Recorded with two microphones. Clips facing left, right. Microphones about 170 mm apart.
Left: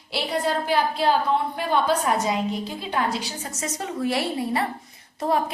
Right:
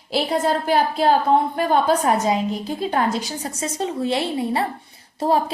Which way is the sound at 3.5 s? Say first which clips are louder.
Right 5 dB; 30° right (ahead or behind).